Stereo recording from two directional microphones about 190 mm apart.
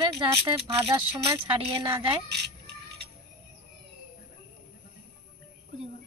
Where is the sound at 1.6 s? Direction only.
25° right (ahead or behind).